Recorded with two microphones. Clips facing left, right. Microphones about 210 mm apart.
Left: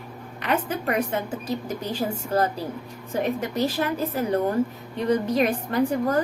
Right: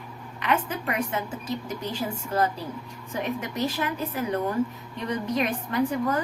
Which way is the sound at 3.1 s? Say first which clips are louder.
Left 5 dB; 35° left (ahead or behind).